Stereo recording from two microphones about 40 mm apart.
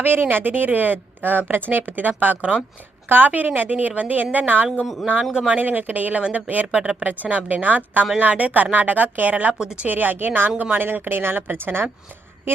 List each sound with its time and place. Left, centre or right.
0.0 s a woman's voice: right
4.8 s speech: centre
5.5 s a woman's voice: right
6.7 s speech: right
7.0 s a woman's voice: right
9.6 s speech: right
9.8 s a woman's voice: right